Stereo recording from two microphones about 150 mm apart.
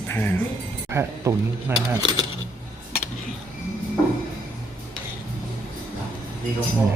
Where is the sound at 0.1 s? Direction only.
10° left (ahead or behind).